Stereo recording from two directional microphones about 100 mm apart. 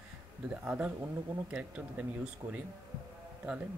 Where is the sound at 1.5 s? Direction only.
15° right (ahead or behind).